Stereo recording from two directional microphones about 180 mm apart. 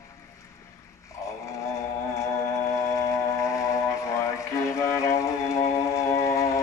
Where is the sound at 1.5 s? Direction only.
15° left (ahead or behind).